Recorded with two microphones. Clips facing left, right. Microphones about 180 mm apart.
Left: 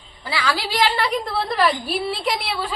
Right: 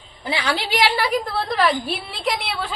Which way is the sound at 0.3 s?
20° right (ahead or behind).